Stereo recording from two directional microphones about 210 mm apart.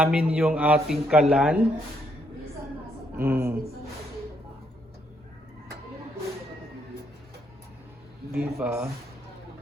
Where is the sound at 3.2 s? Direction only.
10° right (ahead or behind).